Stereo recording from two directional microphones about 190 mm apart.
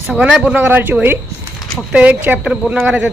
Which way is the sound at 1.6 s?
Centre (ahead or behind).